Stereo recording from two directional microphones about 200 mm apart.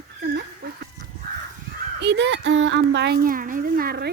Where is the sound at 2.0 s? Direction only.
60° right (ahead or behind).